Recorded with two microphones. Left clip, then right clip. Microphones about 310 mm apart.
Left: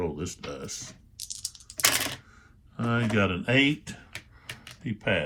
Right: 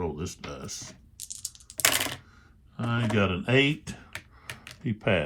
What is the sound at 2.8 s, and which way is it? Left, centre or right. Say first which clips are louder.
Speech: left 1 dB; centre.